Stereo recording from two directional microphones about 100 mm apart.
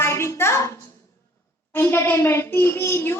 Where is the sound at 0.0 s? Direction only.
25° left (ahead or behind).